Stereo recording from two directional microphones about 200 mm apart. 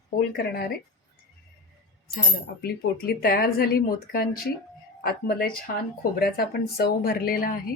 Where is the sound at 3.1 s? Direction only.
50° left (ahead or behind).